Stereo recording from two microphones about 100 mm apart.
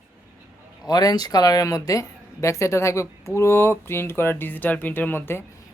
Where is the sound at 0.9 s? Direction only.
40° left (ahead or behind); by 5.4 s 20° left (ahead or behind).